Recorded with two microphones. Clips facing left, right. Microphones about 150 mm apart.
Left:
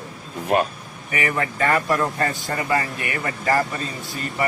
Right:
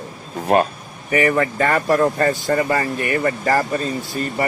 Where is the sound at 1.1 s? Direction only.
40° right (ahead or behind).